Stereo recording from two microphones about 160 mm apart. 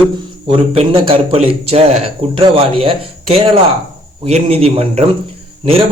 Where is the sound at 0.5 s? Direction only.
35° right (ahead or behind).